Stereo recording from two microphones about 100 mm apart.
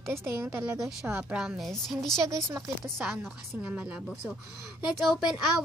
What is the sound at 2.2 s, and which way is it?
Speech, 30° right (ahead or behind).